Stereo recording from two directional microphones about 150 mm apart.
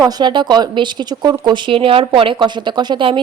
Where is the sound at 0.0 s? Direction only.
30° right (ahead or behind).